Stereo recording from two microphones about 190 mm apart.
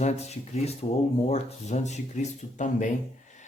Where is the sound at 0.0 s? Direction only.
35° left (ahead or behind).